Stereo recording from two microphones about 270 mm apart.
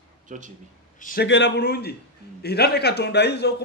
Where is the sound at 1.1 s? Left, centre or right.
Left.